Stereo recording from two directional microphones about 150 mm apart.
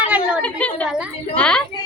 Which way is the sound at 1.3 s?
5° left (ahead or behind).